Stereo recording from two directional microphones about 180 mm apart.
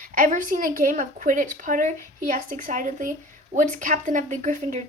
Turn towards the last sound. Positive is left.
turn(degrees=-45)  # may be behind; listen again after turning